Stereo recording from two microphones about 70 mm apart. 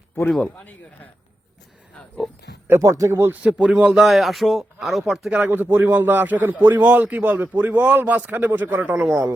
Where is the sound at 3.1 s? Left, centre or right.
Right.